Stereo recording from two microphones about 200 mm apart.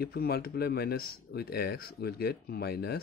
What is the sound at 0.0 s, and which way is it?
Speech, 50° left (ahead or behind).